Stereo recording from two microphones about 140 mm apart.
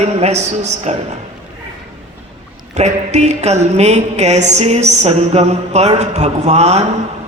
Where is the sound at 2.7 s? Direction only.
55° right (ahead or behind).